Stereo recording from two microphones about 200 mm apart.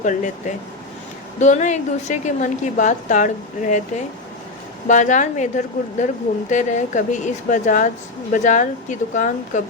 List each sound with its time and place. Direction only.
0.0 s a woman's voice: 40° left (ahead or behind)